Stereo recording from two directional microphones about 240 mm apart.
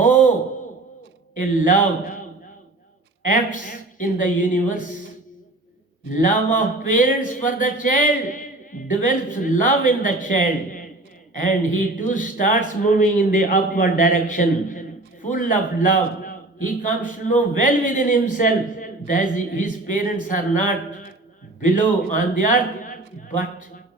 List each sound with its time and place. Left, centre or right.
0.0 s a sound: left
1.4 s speech: left
3.2 s speech: left
6.1 s a man's voice: left